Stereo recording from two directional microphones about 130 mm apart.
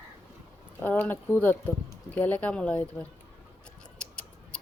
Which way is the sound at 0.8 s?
15° left (ahead or behind).